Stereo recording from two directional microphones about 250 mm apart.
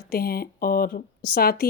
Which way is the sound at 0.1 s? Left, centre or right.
Left.